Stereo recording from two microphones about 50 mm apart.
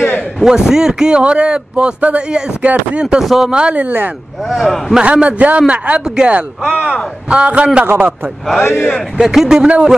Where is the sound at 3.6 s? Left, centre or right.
Right.